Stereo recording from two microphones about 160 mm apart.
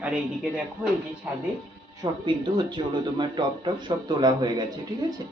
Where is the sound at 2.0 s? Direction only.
30° right (ahead or behind).